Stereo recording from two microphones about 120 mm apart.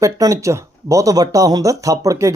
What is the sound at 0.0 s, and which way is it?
Speech, 25° right (ahead or behind).